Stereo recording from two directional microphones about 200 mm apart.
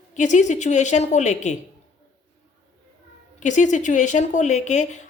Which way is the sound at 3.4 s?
40° left (ahead or behind).